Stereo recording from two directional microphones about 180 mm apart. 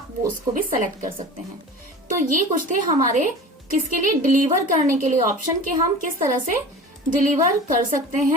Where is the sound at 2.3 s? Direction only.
45° right (ahead or behind).